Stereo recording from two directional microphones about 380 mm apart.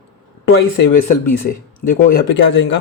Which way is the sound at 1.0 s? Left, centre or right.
Left.